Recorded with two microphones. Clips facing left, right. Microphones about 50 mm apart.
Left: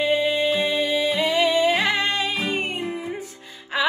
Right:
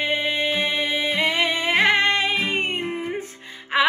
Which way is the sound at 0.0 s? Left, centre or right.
Right.